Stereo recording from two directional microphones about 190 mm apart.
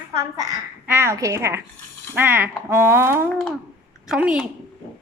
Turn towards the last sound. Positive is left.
turn(degrees=-5)  # may be behind; listen again after turning